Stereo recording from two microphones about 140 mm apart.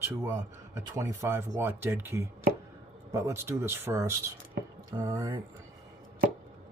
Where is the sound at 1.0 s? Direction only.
20° right (ahead or behind).